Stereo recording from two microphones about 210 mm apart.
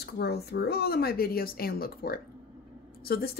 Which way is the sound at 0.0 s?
50° left (ahead or behind).